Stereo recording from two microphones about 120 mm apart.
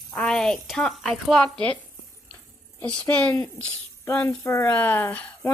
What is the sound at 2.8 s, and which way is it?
Speech, 10° left (ahead or behind).